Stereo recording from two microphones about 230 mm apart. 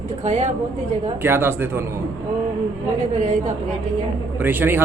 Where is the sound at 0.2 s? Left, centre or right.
Right.